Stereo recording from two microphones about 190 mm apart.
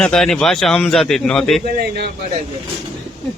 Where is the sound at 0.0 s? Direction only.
5° left (ahead or behind).